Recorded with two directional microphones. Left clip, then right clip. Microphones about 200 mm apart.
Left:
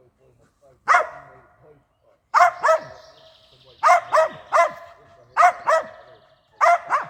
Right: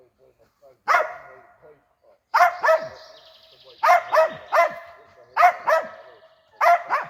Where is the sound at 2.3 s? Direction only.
Centre (ahead or behind).